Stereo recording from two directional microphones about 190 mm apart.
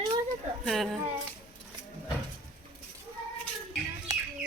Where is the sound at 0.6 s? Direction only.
Centre (ahead or behind).